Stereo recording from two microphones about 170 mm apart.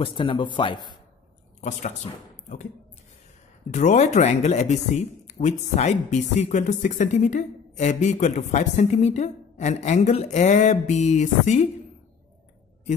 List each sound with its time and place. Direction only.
0.0 s a man's voice: 30° left (ahead or behind)
1.6 s speech: 45° left (ahead or behind)
3.7 s speech: 45° left (ahead or behind)